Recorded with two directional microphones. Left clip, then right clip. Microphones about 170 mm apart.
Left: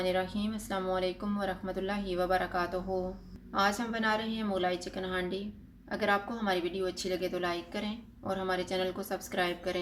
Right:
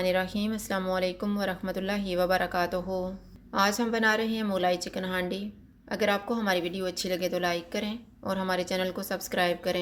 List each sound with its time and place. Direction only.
0.0 s a woman's voice: 50° right (ahead or behind)